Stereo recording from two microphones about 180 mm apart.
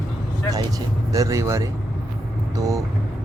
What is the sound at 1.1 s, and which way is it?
Speech, 20° right (ahead or behind).